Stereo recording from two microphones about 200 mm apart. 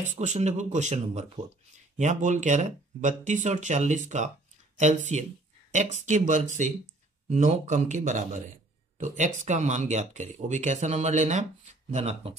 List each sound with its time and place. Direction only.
0.0 s speech: 35° right (ahead or behind)